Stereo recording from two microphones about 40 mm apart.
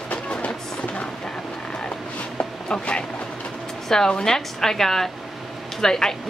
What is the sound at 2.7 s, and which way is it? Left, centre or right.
A woman's voice, left.